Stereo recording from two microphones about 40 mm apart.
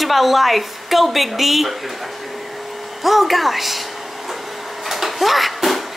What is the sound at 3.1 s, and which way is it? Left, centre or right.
Speech, centre.